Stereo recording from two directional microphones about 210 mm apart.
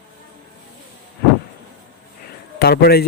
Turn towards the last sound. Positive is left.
turn(degrees=50)  # may be behind; listen again after turning